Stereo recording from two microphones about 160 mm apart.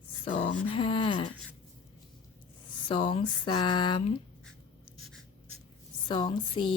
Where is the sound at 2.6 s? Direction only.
30° left (ahead or behind).